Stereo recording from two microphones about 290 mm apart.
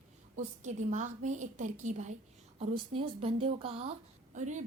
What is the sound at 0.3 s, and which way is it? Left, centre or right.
A woman's voice, right.